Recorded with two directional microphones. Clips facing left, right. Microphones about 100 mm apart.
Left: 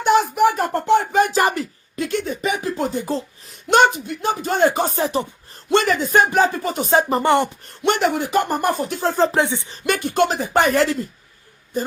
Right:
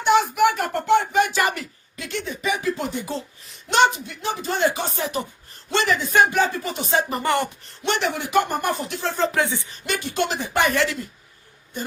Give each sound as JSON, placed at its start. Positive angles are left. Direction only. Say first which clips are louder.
{"t": 0.0, "sound": "a sound", "louder": "left 2 dB", "side_deg": 40}
{"t": 3.7, "sound": "speech", "louder": "left 3 dB", "side_deg": 45}
{"t": 5.7, "sound": "speech", "louder": "left 3 dB", "side_deg": 45}
{"t": 7.1, "sound": "speech", "louder": "left 5 dB", "side_deg": 25}
{"t": 7.6, "sound": "speech", "louder": "left 5 dB", "side_deg": 50}
{"t": 9.4, "sound": "speech", "louder": "left 3 dB", "side_deg": 20}
{"t": 9.8, "sound": "speech", "louder": "left 7 dB", "side_deg": 50}